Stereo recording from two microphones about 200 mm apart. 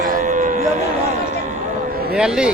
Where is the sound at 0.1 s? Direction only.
40° right (ahead or behind).